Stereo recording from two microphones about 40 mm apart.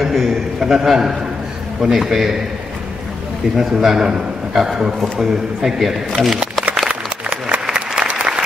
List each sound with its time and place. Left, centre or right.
0.0 s a man's voice: centre
3.5 s a man's voice: centre
6.9 s applause: right